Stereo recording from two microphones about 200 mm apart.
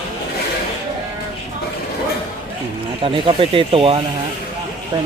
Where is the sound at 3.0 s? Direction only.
25° right (ahead or behind).